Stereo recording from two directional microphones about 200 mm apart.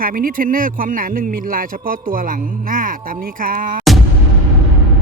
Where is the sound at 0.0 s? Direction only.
45° right (ahead or behind).